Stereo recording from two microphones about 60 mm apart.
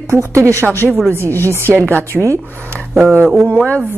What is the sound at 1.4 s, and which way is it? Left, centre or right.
Speech, right.